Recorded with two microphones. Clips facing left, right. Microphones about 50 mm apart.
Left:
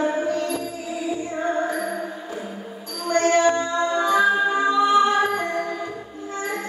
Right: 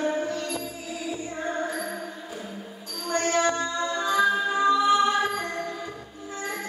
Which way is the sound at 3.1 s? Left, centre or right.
Centre.